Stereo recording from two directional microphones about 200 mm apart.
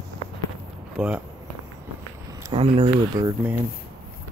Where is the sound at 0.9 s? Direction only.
5° right (ahead or behind).